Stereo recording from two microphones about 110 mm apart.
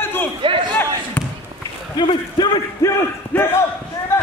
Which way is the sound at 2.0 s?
45° left (ahead or behind).